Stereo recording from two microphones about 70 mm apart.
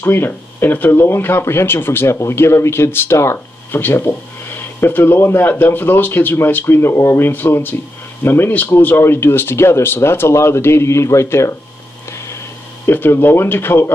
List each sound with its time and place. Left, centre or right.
0.0 s speech: left
12.8 s speech: left